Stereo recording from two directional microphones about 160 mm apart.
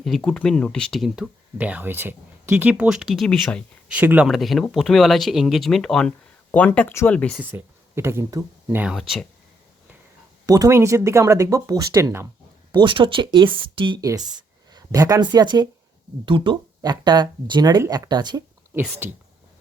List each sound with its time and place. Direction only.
0.0 s speech: centre (ahead or behind)
3.9 s speech: 10° right (ahead or behind); by 7.3 s 10° left (ahead or behind)
7.5 s speech: 15° right (ahead or behind)
8.8 s speech: 5° right (ahead or behind)
10.4 s speech: 20° right (ahead or behind)
12.7 s speech: 30° right (ahead or behind)
18.7 s speech: 15° right (ahead or behind)